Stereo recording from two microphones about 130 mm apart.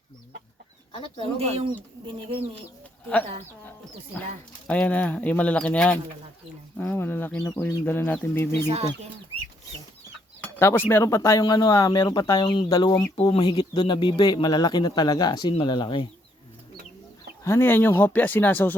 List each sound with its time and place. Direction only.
0.9 s speech: 45° left (ahead or behind)
1.4 s speech: 50° right (ahead or behind)
4.6 s speech: 10° left (ahead or behind)
10.4 s cutlery: 15° left (ahead or behind)
12.5 s speech: 40° left (ahead or behind)
12.7 s speech: 30° left (ahead or behind)
17.4 s speech: 20° left (ahead or behind)